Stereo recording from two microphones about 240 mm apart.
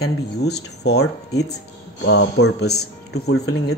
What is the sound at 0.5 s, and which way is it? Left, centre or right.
Speech, left.